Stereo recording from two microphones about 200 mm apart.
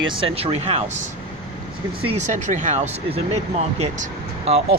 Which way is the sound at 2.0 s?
35° right (ahead or behind).